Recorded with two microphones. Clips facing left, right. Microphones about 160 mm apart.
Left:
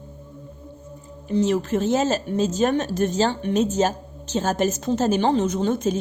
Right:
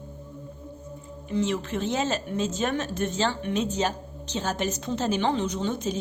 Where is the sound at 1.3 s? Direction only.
40° left (ahead or behind).